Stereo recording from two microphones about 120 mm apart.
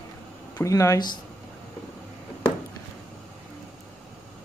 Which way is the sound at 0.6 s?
25° left (ahead or behind).